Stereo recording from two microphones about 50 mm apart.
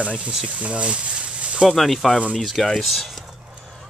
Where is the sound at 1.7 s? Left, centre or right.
Centre.